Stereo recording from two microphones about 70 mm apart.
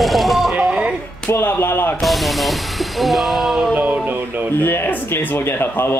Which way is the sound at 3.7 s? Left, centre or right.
Centre.